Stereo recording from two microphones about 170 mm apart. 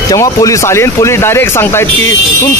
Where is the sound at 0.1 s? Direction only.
20° left (ahead or behind).